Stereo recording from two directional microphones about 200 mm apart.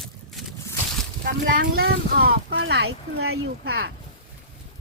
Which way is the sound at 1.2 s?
45° right (ahead or behind).